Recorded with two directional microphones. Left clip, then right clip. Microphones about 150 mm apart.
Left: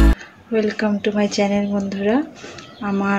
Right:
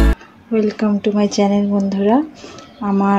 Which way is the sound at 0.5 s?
50° right (ahead or behind).